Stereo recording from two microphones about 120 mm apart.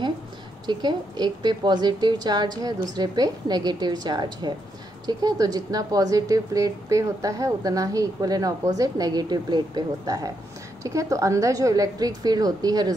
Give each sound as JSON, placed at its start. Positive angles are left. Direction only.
{"t": 0.7, "sound": "a woman's voice", "side_deg": -35}